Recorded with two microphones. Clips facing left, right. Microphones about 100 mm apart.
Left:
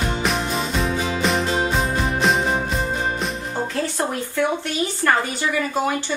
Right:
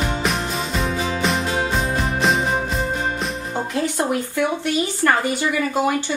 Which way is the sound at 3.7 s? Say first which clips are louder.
Right 5 dB; 15° right (ahead or behind).